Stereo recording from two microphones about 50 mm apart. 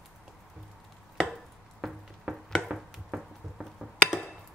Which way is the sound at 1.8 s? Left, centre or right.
Centre.